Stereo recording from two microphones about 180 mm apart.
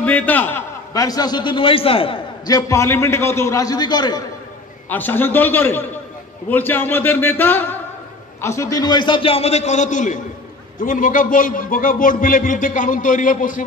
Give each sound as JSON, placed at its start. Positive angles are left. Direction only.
{"t": 0.0, "sound": "a man's voice", "side_deg": 10}
{"t": 4.8, "sound": "a man's voice", "side_deg": 10}